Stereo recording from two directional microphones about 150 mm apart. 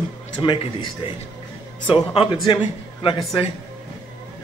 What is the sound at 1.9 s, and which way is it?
Speech, 35° left (ahead or behind).